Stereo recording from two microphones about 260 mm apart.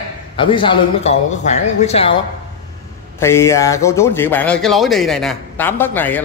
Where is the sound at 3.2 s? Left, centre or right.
Centre.